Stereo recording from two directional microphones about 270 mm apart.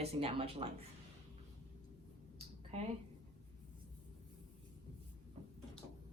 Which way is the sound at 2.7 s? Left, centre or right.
Right.